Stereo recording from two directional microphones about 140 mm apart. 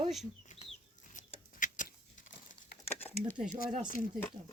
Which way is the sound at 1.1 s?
65° left (ahead or behind).